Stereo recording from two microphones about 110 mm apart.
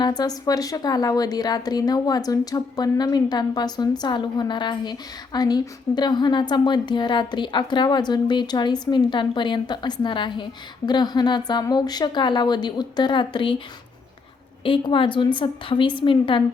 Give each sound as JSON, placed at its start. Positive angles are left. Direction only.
{"t": 0.0, "sound": "a woman's voice", "side_deg": 40}
{"t": 14.6, "sound": "a woman's voice", "side_deg": 50}